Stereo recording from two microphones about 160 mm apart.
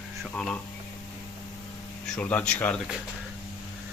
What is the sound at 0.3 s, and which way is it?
Speech, 5° left (ahead or behind).